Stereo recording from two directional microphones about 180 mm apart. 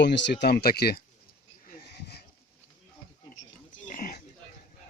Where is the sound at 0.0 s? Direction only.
75° left (ahead or behind).